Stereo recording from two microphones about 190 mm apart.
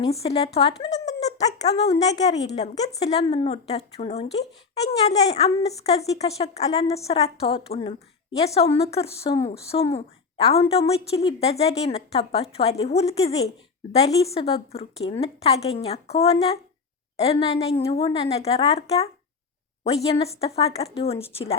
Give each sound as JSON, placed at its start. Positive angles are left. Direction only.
{"t": 0.0, "sound": "speech", "side_deg": 30}
{"t": 0.8, "sound": "a sound", "side_deg": 20}
{"t": 1.6, "sound": "speech", "side_deg": 35}